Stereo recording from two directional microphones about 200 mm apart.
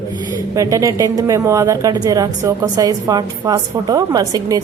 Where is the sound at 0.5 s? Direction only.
15° right (ahead or behind).